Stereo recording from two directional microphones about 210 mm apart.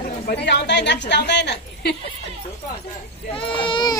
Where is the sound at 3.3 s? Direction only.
25° left (ahead or behind).